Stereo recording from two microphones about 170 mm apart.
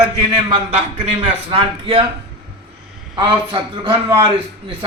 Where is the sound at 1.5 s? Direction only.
35° right (ahead or behind).